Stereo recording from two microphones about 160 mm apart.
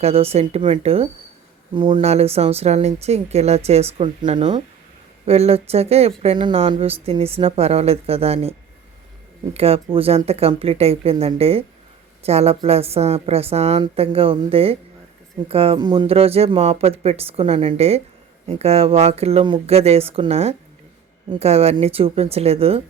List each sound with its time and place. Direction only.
0.0 s speech: 40° right (ahead or behind)
9.6 s speech: 40° right (ahead or behind)